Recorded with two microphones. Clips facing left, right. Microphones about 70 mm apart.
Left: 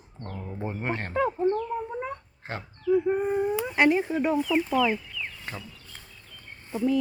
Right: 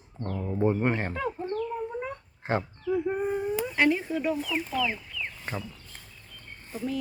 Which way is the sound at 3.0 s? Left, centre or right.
Centre.